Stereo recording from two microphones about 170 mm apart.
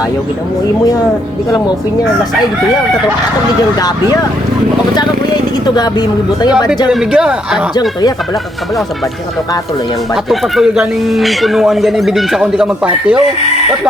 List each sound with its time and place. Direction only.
3.8 s speech: 20° left (ahead or behind)
6.8 s speech: 5° right (ahead or behind)
10.2 s speech: centre (ahead or behind)